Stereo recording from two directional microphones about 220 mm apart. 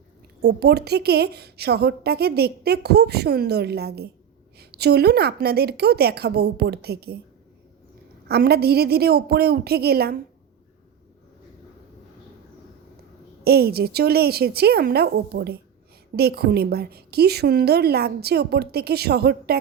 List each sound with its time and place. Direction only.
0.4 s a woman's voice: 50° right (ahead or behind)
8.3 s a woman's voice: 45° right (ahead or behind)
13.4 s a woman's voice: 45° right (ahead or behind)